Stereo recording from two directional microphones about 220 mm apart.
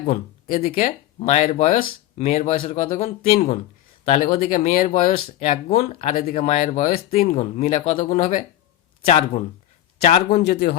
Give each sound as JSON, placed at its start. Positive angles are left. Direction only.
{"t": 0.0, "sound": "speech", "side_deg": 35}
{"t": 10.0, "sound": "speech", "side_deg": 35}